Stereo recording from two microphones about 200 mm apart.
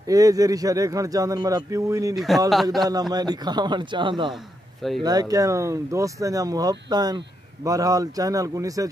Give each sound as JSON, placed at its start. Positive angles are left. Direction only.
{"t": 0.0, "sound": "speech", "side_deg": -15}
{"t": 2.1, "sound": "a man's voice", "side_deg": 0}
{"t": 2.9, "sound": "a man's voice", "side_deg": -20}